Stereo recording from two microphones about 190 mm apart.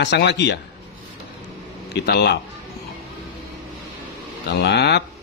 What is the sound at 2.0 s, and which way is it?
Speech, 60° left (ahead or behind).